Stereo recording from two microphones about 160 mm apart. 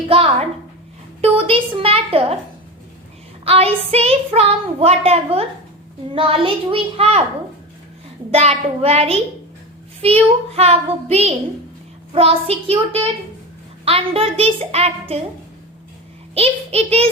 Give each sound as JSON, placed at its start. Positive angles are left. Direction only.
{"t": 0.1, "sound": "a woman's voice", "side_deg": -35}
{"t": 3.4, "sound": "speech", "side_deg": -40}
{"t": 8.3, "sound": "speech", "side_deg": -40}
{"t": 16.3, "sound": "speech", "side_deg": -40}